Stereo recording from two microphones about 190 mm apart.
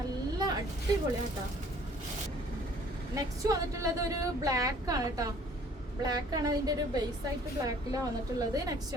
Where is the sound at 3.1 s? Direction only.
20° right (ahead or behind).